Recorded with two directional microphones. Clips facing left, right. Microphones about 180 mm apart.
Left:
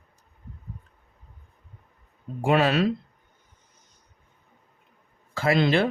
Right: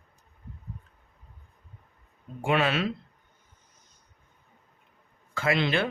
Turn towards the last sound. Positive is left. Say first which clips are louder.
# left 5 dB
turn(degrees=35)  # may be behind; listen again after turning